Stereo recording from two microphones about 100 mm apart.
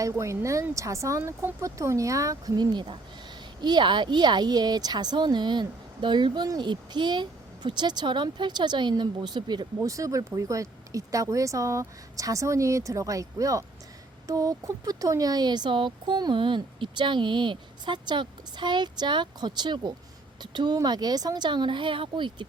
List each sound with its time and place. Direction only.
0.0 s speech: 30° right (ahead or behind); by 22.4 s 50° right (ahead or behind)